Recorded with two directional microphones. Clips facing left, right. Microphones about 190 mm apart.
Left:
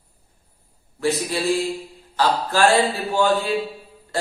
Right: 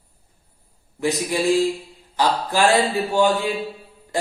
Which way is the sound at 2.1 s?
15° right (ahead or behind).